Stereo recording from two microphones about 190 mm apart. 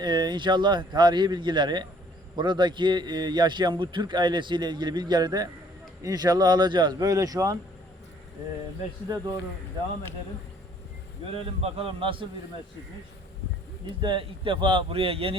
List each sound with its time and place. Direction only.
0.0 s a man's voice: 20° right (ahead or behind)
9.0 s a man's voice: 20° right (ahead or behind)
11.6 s a man's voice: 30° right (ahead or behind)
14.0 s a man's voice: 25° right (ahead or behind)